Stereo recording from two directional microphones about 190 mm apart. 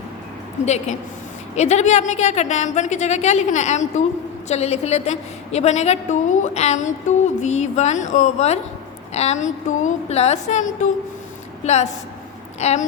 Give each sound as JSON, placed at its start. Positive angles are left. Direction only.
{"t": 0.6, "sound": "a woman's voice", "side_deg": 35}